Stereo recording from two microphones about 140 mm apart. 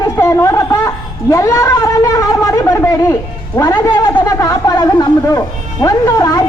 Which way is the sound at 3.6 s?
25° left (ahead or behind).